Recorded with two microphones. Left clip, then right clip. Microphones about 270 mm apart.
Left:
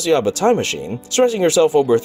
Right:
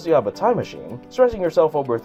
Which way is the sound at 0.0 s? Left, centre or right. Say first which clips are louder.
Left 2 dB; left.